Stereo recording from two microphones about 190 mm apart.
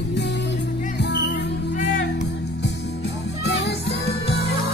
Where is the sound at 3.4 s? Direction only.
65° left (ahead or behind).